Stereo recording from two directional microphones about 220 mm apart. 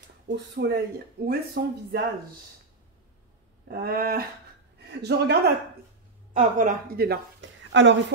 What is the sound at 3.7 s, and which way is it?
Speech, 45° right (ahead or behind).